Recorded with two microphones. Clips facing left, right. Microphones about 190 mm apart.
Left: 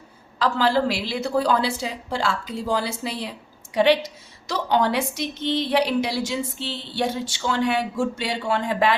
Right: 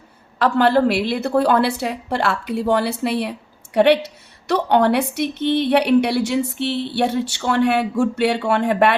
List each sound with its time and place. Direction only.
0.3 s a woman's voice: 60° right (ahead or behind)